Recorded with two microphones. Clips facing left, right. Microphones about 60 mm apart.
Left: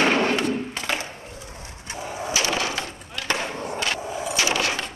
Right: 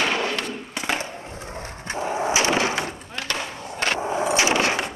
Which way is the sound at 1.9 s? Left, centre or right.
Right.